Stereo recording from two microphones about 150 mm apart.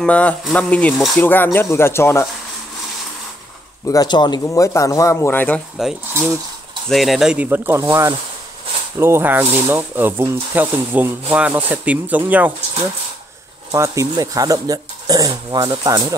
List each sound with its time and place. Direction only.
0.0 s speech: 10° left (ahead or behind)
1.2 s speech: 15° left (ahead or behind)
3.8 s speech: 25° left (ahead or behind)
5.8 s speech: centre (ahead or behind)
13.7 s speech: 20° right (ahead or behind)